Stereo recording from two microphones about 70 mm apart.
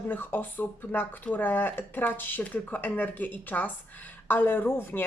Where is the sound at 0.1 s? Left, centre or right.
Left.